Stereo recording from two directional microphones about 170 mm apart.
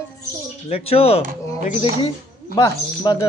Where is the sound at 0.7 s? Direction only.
35° left (ahead or behind).